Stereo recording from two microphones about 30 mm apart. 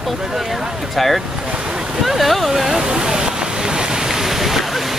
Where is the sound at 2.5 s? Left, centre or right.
Centre.